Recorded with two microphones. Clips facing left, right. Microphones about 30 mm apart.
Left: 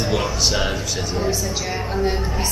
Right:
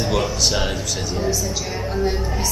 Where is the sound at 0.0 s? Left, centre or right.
Centre.